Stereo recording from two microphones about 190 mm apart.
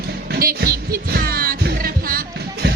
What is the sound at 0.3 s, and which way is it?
Music, 50° right (ahead or behind).